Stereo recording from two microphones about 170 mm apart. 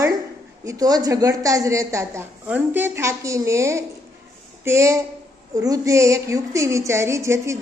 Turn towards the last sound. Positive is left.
turn(degrees=-15)  # may be behind; listen again after turning